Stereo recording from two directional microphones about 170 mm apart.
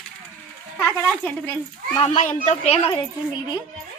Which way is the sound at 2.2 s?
45° left (ahead or behind).